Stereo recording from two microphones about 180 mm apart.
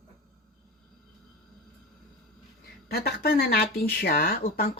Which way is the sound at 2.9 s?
60° left (ahead or behind).